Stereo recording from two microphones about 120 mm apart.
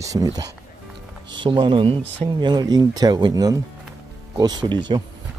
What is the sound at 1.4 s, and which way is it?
Speech, 40° right (ahead or behind).